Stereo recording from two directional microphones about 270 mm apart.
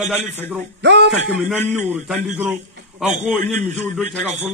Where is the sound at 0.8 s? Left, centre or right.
Right.